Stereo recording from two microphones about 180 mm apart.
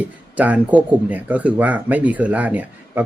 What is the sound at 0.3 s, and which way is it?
Speech, 10° right (ahead or behind).